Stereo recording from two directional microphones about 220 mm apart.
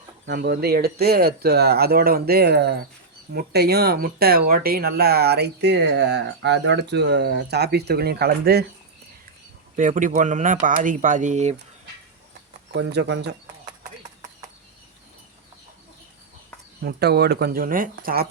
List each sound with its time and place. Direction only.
0.3 s speech: 45° right (ahead or behind)
9.7 s speech: 35° right (ahead or behind)
12.7 s speech: 50° right (ahead or behind)
16.8 s speech: 45° right (ahead or behind)